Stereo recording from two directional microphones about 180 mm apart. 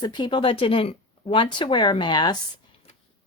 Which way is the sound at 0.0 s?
25° left (ahead or behind).